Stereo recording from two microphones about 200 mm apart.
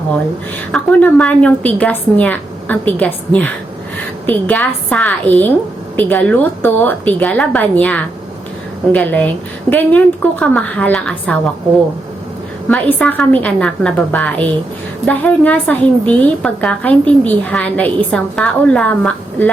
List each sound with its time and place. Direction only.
0.7 s a woman's voice: 5° left (ahead or behind)
12.6 s a woman's voice: 5° left (ahead or behind)